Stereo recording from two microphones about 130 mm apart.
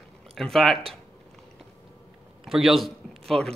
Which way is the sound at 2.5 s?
Centre (ahead or behind).